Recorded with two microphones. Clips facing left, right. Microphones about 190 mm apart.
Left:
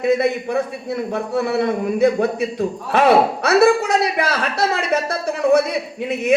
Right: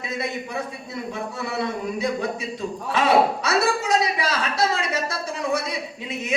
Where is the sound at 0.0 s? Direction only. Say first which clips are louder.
Left 12 dB; 60° left (ahead or behind).